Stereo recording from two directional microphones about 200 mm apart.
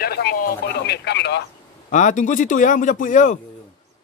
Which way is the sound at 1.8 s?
40° left (ahead or behind).